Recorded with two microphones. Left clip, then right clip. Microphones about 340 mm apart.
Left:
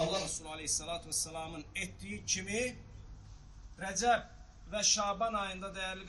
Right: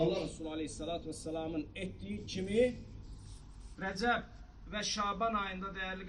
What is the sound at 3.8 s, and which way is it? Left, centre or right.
A man's voice, left.